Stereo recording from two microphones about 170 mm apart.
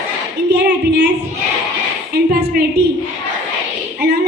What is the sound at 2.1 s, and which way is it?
Speech, 70° right (ahead or behind).